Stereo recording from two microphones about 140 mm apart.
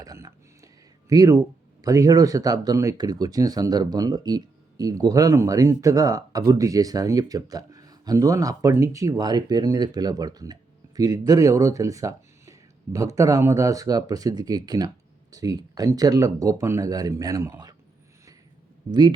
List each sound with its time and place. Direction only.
0.0 s speech: 25° right (ahead or behind)
18.9 s speech: 30° right (ahead or behind)